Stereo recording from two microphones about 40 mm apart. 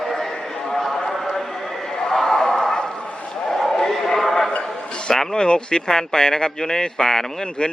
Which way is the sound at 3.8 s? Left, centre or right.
Centre.